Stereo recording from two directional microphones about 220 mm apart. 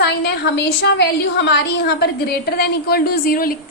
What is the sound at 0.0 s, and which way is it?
A woman's voice, 50° left (ahead or behind).